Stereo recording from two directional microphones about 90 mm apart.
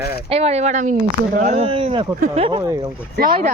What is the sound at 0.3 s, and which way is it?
Speech, 90° right.